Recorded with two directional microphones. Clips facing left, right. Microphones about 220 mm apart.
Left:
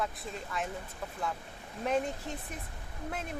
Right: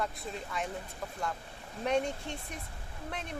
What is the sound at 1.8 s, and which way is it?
Speech, centre (ahead or behind).